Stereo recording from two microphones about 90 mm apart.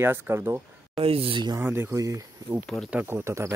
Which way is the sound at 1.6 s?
25° right (ahead or behind).